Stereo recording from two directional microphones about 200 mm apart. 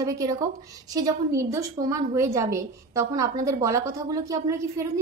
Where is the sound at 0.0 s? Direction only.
15° right (ahead or behind).